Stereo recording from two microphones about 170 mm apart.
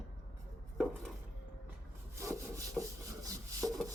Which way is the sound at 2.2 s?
20° right (ahead or behind).